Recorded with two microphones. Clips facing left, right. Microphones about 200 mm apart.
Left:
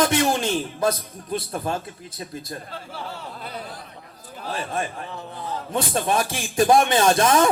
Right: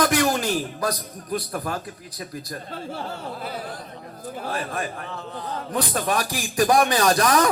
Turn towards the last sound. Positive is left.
turn(degrees=25)  # may be behind; listen again after turning